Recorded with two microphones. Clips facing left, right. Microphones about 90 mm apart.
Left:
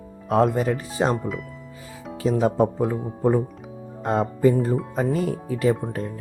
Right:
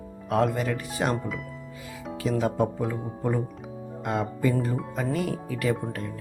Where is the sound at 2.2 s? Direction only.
30° left (ahead or behind).